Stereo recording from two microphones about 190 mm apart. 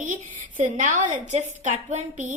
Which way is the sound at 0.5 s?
45° right (ahead or behind).